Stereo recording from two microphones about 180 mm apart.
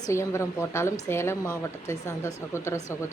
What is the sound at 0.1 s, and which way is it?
A woman's voice, 15° left (ahead or behind).